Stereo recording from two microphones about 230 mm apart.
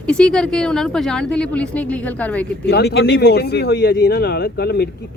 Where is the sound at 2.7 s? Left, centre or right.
Left.